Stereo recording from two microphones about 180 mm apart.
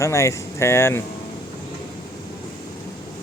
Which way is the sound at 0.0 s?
15° left (ahead or behind).